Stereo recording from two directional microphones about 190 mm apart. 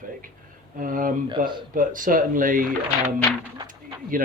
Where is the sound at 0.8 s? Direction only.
45° right (ahead or behind).